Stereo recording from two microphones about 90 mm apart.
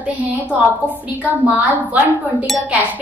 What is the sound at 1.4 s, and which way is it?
A woman's voice, 15° right (ahead or behind).